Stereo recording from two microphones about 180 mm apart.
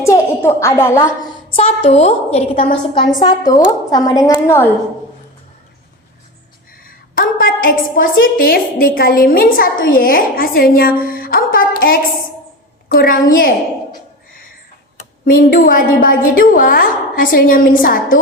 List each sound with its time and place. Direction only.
0.0 s a woman's voice: 15° left (ahead or behind)
1.5 s a woman's voice: 35° left (ahead or behind); by 4.7 s 15° left (ahead or behind)
6.8 s a woman's voice: 55° left (ahead or behind)
15.2 s a woman's voice: 55° left (ahead or behind)